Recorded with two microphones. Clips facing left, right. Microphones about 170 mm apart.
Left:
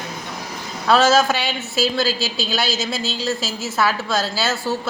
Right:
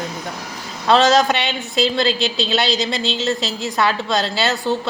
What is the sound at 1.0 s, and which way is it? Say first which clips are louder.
A woman's voice: right 1 dB; 5° left (ahead or behind).